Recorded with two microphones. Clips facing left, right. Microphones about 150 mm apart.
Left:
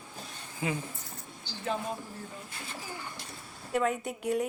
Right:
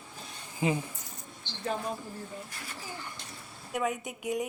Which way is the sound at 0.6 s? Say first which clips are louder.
Right 4 dB; 20° right (ahead or behind).